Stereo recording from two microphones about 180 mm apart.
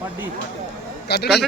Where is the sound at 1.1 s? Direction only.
65° left (ahead or behind).